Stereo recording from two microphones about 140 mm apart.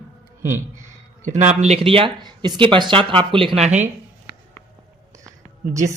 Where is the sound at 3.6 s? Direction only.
55° right (ahead or behind).